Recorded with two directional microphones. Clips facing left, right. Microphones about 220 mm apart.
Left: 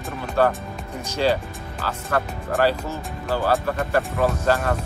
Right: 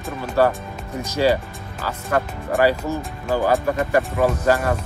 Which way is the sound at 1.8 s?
10° right (ahead or behind).